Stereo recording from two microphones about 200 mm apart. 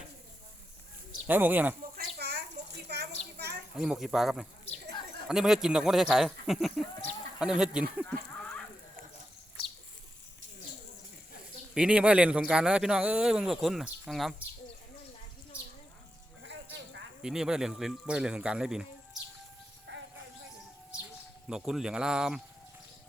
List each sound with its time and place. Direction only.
1.3 s speech: 10° right (ahead or behind)
2.1 s a sound: 55° right (ahead or behind)
3.8 s speech: centre (ahead or behind)
11.7 s speech: 5° right (ahead or behind)
16.4 s sheep: 60° right (ahead or behind)
17.2 s speech: 5° right (ahead or behind)
19.9 s music: 60° right (ahead or behind)
21.4 s speech: 5° right (ahead or behind)